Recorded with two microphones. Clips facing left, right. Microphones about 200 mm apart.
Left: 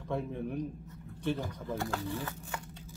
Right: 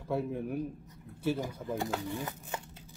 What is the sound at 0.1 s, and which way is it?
A man's voice, 5° right (ahead or behind).